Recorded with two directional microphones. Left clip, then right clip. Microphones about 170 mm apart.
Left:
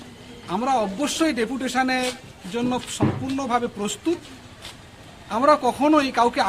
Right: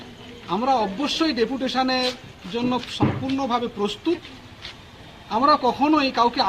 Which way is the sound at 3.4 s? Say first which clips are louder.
Even; 25° left (ahead or behind).